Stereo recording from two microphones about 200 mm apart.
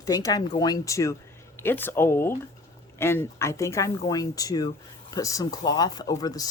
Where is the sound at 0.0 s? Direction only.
15° left (ahead or behind).